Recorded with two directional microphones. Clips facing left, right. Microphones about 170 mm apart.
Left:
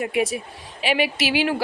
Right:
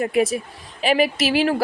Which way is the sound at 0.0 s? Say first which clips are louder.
Right 3 dB; 40° right (ahead or behind).